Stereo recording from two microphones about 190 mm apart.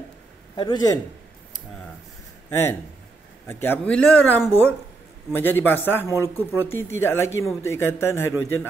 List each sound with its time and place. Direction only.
0.6 s a man's voice: 25° left (ahead or behind)
3.4 s speech: 10° left (ahead or behind)